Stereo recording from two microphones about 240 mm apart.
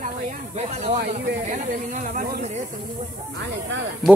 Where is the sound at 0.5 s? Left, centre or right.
Right.